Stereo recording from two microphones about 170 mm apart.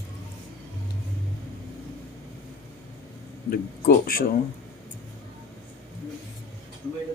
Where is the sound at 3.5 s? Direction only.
60° left (ahead or behind).